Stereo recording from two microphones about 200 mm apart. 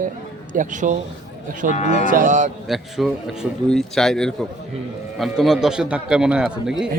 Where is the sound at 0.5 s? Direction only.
40° right (ahead or behind).